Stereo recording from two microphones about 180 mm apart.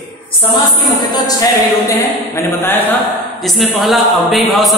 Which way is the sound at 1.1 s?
20° left (ahead or behind).